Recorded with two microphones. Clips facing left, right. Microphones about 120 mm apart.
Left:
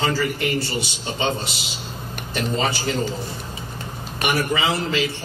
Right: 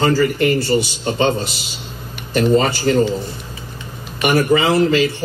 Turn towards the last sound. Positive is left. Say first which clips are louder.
# right 8 dB
turn(degrees=-45)  # may be behind; listen again after turning